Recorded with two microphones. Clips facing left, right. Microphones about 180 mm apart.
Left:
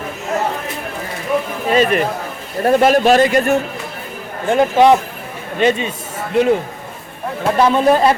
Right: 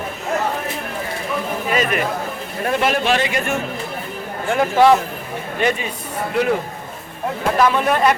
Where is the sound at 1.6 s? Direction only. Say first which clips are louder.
Left 6 dB; 30° left (ahead or behind).